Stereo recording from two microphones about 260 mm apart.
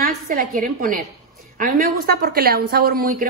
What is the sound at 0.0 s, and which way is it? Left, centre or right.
A woman's voice, right.